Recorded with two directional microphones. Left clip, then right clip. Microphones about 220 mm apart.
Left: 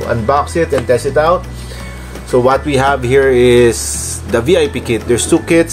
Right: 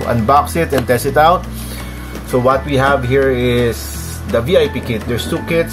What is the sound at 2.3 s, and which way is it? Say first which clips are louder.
Speech: left 2 dB; 15° left (ahead or behind).